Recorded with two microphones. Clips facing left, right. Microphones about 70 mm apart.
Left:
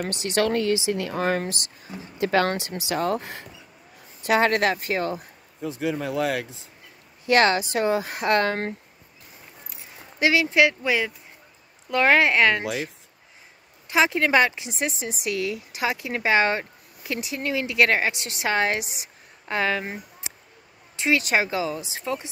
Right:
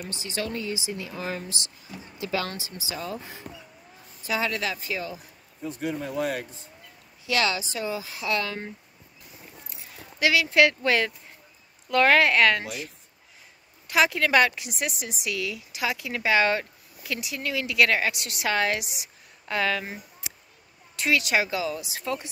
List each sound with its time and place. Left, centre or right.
0.1 s speech: left
2.1 s speech: left
4.2 s speech: left
5.6 s a man's voice: left
7.2 s speech: left
10.1 s a woman's voice: left; by 11.1 s centre
11.9 s speech: centre
13.8 s speech: left
20.9 s a sound: left
21.2 s speech: left